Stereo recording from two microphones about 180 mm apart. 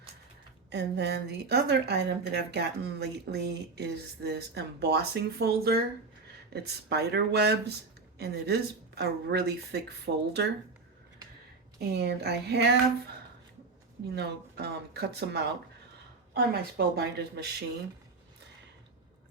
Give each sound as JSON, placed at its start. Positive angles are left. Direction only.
{"t": 0.7, "sound": "a woman's voice", "side_deg": -70}
{"t": 11.8, "sound": "a woman's voice", "side_deg": -60}
{"t": 14.2, "sound": "a woman's voice", "side_deg": -65}